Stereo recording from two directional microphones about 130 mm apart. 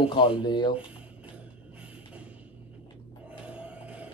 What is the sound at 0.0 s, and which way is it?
Speech, 40° left (ahead or behind).